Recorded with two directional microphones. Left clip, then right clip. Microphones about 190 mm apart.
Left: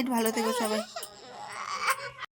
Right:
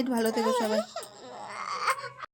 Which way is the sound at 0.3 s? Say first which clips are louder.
Right 2 dB; 55° right (ahead or behind).